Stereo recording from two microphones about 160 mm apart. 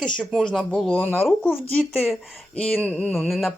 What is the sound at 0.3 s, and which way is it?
Speech, centre (ahead or behind).